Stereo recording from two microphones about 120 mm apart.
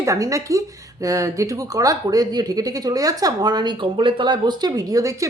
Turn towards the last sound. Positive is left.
turn(degrees=-25)  # may be behind; listen again after turning